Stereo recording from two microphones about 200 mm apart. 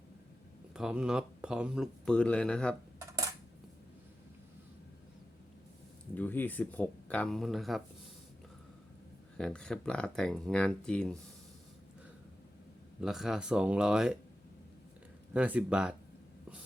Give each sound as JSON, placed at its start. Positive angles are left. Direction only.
{"t": 0.7, "sound": "speech", "side_deg": -5}
{"t": 3.0, "sound": "dishes", "side_deg": -15}
{"t": 6.1, "sound": "speech", "side_deg": 10}
{"t": 9.4, "sound": "speech", "side_deg": 5}
{"t": 13.0, "sound": "speech", "side_deg": 0}
{"t": 15.3, "sound": "speech", "side_deg": -5}